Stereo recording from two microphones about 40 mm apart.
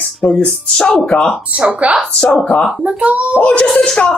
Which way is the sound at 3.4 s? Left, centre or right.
Left.